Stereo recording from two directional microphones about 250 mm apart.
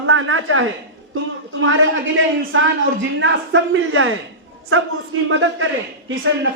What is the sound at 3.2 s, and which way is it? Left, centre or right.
Speech, right.